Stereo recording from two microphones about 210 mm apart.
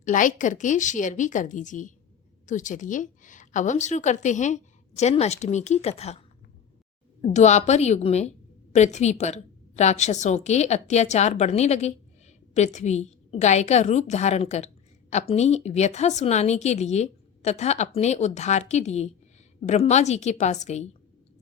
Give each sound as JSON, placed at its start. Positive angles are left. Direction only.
{"t": 0.0, "sound": "a woman's voice", "side_deg": 40}
{"t": 7.2, "sound": "a woman's voice", "side_deg": 35}